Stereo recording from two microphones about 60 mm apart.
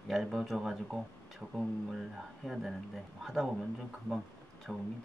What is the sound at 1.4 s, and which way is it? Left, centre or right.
Speech, centre.